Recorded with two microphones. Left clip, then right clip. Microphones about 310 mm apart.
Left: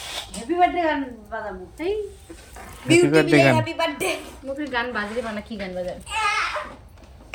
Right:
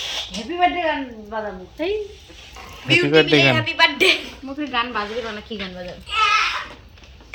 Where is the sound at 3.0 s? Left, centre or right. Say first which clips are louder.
Right 2 dB; centre.